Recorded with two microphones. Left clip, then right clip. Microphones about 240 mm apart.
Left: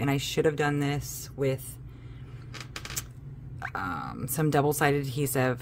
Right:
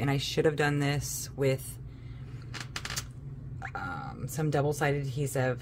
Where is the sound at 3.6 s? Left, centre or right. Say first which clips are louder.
Left 4 dB; centre.